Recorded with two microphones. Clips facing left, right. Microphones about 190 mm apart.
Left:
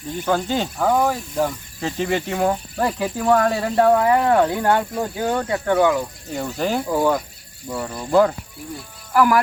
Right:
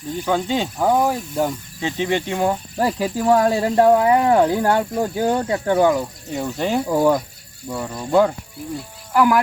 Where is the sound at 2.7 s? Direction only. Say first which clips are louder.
Right 2 dB; 15° right (ahead or behind).